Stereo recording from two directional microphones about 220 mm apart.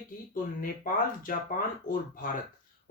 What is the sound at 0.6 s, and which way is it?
Speech, 40° left (ahead or behind).